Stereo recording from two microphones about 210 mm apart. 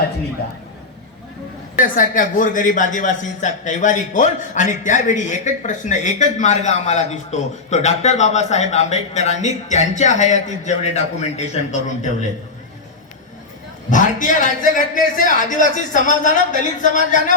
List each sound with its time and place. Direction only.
1.7 s a man's voice: 40° left (ahead or behind)
13.9 s a man's voice: 35° left (ahead or behind)